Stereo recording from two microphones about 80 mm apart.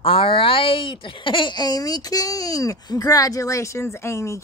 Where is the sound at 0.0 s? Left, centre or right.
Left.